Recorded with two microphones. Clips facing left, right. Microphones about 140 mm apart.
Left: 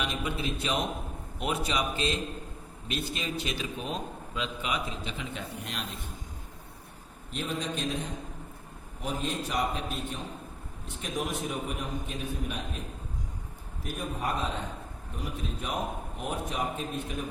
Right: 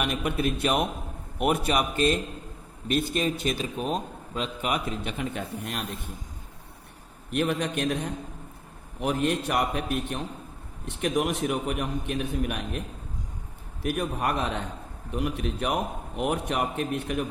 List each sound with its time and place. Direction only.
0.0 s a man's voice: 55° right (ahead or behind)
7.3 s a man's voice: 65° right (ahead or behind)
9.0 s a man's voice: 65° right (ahead or behind)
13.8 s a man's voice: 70° right (ahead or behind)